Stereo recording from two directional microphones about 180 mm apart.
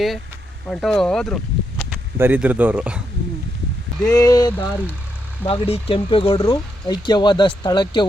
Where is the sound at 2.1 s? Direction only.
10° right (ahead or behind).